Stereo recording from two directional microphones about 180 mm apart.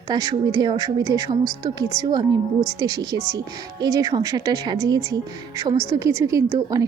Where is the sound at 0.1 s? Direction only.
20° right (ahead or behind).